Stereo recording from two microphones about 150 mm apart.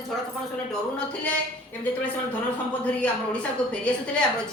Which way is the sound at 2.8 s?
10° left (ahead or behind).